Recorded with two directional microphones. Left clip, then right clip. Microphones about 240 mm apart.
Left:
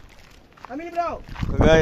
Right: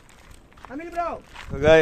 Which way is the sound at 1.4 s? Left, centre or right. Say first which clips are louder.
Right 1 dB; centre.